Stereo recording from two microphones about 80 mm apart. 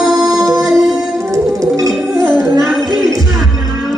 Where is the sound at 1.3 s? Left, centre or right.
Right.